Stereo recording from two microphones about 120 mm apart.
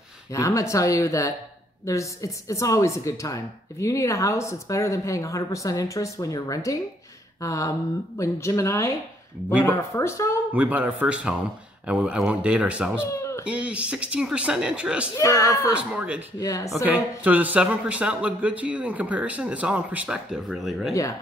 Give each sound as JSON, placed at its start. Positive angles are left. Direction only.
{"t": 0.3, "sound": "speech", "side_deg": 25}
{"t": 10.5, "sound": "speech", "side_deg": -10}
{"t": 13.1, "sound": "a sound", "side_deg": 25}
{"t": 13.5, "sound": "speech", "side_deg": -10}
{"t": 15.1, "sound": "speech", "side_deg": 25}
{"t": 15.7, "sound": "speech", "side_deg": -10}
{"t": 16.3, "sound": "speech", "side_deg": 30}
{"t": 16.8, "sound": "speech", "side_deg": -15}